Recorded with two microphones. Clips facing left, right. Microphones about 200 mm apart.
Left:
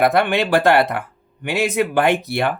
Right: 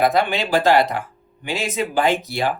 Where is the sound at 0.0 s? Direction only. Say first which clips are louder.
Left 2 dB; 60° left (ahead or behind).